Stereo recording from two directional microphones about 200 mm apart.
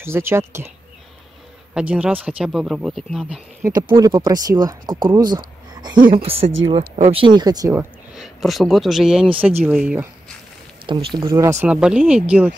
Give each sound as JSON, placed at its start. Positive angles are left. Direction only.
{"t": 0.0, "sound": "speech", "side_deg": -10}
{"t": 1.7, "sound": "speech", "side_deg": -5}
{"t": 3.6, "sound": "speech", "side_deg": -20}
{"t": 8.1, "sound": "speech", "side_deg": 0}
{"t": 10.9, "sound": "speech", "side_deg": -25}
{"t": 11.6, "sound": "speech", "side_deg": -5}